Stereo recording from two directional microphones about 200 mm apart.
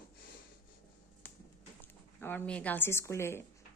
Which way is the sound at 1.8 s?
10° left (ahead or behind).